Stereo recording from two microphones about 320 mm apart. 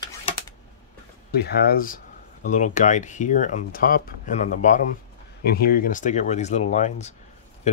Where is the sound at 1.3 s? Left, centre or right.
Left.